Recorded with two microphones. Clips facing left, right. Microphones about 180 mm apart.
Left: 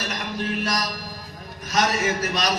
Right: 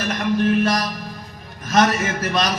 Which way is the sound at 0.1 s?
55° right (ahead or behind).